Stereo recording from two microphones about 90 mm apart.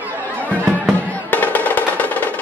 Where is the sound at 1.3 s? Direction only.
20° left (ahead or behind).